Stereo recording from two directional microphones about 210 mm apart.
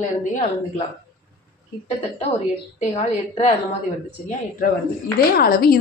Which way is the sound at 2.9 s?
20° left (ahead or behind).